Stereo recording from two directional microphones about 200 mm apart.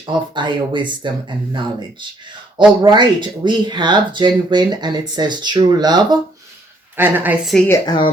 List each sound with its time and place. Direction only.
0.0 s speech: 20° right (ahead or behind)
2.8 s speech: 25° right (ahead or behind)
6.9 s a woman's voice: 10° right (ahead or behind)
7.7 s speech: 20° left (ahead or behind)